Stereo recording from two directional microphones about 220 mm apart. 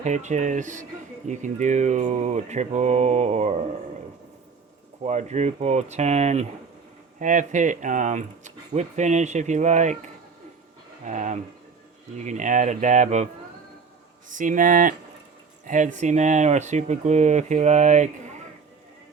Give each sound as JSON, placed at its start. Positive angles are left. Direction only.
{"t": 0.0, "sound": "speech", "side_deg": -30}
{"t": 5.0, "sound": "speech", "side_deg": -30}
{"t": 11.0, "sound": "speech", "side_deg": -35}
{"t": 14.3, "sound": "speech", "side_deg": -35}